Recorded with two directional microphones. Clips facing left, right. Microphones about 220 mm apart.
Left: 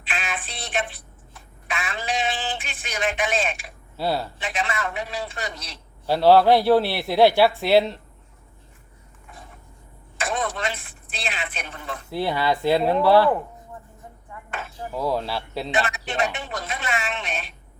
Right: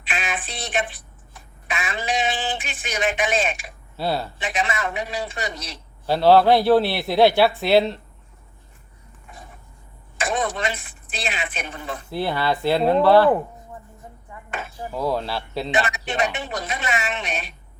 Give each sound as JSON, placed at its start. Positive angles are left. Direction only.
{"t": 0.0, "sound": "a sound", "side_deg": -15}
{"t": 2.6, "sound": "a man's voice", "side_deg": -15}
{"t": 3.2, "sound": "a woman's voice", "side_deg": 0}
{"t": 3.9, "sound": "speech", "side_deg": 10}
{"t": 4.6, "sound": "a man's voice", "side_deg": -15}
{"t": 6.1, "sound": "speech", "side_deg": 10}
{"t": 10.2, "sound": "vehicle", "side_deg": -15}
{"t": 12.1, "sound": "speech", "side_deg": 10}
{"t": 14.9, "sound": "speech", "side_deg": 5}
{"t": 15.7, "sound": "a man's voice", "side_deg": -15}
{"t": 17.0, "sound": "a woman's voice", "side_deg": -5}